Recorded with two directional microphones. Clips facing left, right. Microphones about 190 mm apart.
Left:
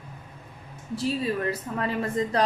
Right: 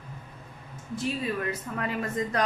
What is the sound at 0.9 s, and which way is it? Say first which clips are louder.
A woman's voice: left 3 dB; 35° left (ahead or behind).